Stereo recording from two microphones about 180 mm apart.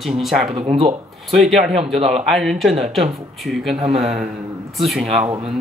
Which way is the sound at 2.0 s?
35° right (ahead or behind).